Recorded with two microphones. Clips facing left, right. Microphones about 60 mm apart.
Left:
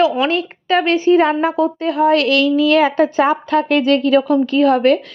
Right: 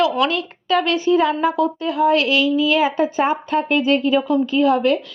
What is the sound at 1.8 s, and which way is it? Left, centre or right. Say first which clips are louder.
A woman's voice: left 3 dB; left.